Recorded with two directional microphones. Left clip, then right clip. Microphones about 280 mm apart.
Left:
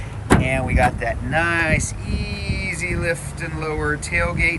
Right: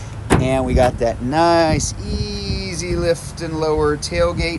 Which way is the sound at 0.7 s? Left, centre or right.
Right.